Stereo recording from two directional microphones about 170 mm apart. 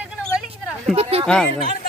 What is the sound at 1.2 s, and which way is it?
Speech, 5° left (ahead or behind).